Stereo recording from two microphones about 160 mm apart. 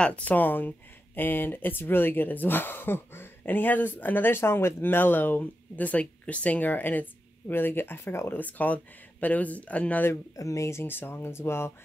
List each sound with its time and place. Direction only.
0.0 s speech: 10° left (ahead or behind)
10.3 s speech: 20° left (ahead or behind)